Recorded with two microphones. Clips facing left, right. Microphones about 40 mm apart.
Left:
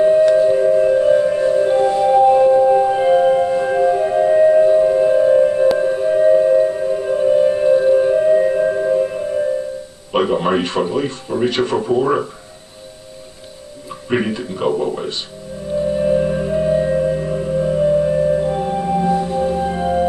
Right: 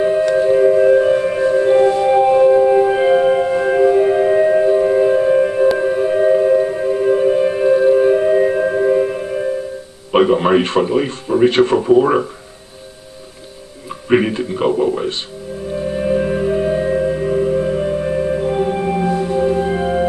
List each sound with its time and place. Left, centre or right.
0.4 s music: centre
10.1 s speech: centre
13.8 s music: centre
15.7 s music: centre